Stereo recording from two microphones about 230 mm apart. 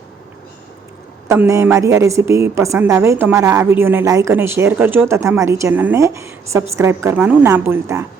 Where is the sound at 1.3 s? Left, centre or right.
Centre.